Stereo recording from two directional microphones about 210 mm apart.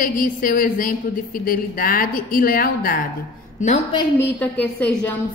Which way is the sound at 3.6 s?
35° left (ahead or behind).